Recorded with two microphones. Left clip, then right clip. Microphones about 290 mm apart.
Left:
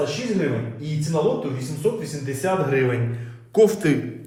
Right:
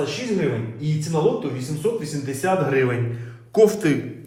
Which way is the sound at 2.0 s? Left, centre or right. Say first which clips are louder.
Right 1 dB; centre.